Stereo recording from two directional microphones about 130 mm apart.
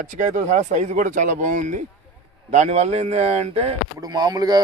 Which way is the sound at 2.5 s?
60° right (ahead or behind).